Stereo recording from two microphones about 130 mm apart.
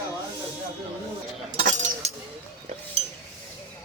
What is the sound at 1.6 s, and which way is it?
Chink, 75° right (ahead or behind).